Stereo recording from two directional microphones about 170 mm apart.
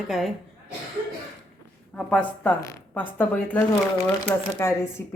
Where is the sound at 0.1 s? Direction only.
Centre (ahead or behind).